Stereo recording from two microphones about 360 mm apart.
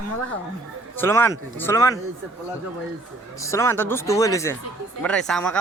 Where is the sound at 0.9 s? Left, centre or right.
Centre.